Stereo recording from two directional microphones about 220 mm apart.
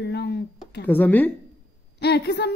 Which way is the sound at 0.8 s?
10° left (ahead or behind).